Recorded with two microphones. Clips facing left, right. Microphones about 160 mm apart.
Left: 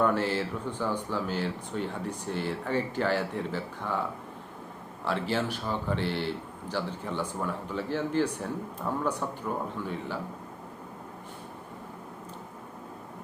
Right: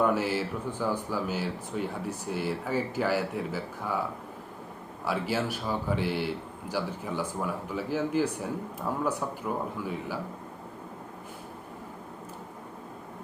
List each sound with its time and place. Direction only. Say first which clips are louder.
0.0 s a man's voice: even; 10° right (ahead or behind)
5.0 s a man's voice: even; 10° right (ahead or behind)